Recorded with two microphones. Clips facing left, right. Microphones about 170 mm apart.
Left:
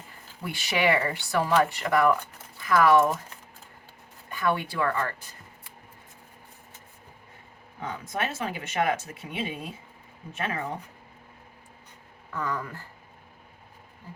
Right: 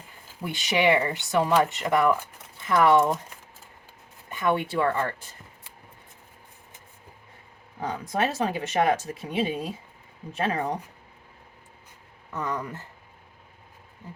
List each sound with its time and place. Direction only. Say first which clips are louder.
0.4 s speech: right 3 dB; 20° right (ahead or behind)
4.3 s a woman's voice: right 2 dB; 20° right (ahead or behind)
7.8 s speech: right 5 dB; 35° right (ahead or behind)
12.3 s speech: right 1 dB; 20° right (ahead or behind)